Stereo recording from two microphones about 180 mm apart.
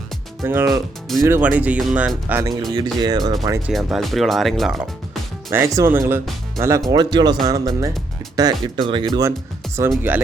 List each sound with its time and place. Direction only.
0.4 s speech: 15° right (ahead or behind)
2.4 s speech: 20° right (ahead or behind)
3.7 s speech: centre (ahead or behind)
5.5 s speech: 15° right (ahead or behind)
10.1 s speech: 10° right (ahead or behind)